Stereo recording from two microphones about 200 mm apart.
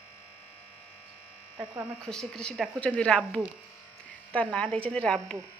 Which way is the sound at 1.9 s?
5° left (ahead or behind).